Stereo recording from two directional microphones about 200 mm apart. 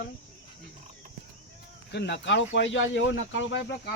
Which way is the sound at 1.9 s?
60° left (ahead or behind).